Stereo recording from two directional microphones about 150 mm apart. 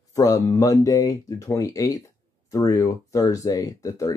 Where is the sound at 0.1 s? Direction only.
20° left (ahead or behind).